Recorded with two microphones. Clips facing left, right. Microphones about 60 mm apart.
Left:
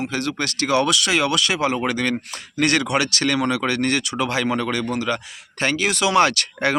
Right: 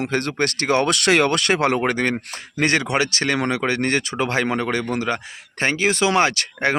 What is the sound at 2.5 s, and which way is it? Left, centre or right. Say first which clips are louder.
Speech: even; right.